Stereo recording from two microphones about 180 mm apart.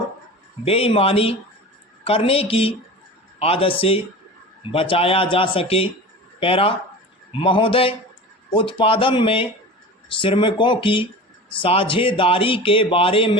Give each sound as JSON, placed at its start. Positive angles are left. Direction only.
{"t": 0.6, "sound": "speech", "side_deg": 30}